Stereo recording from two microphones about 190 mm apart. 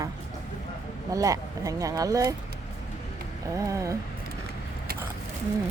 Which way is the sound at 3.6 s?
15° right (ahead or behind).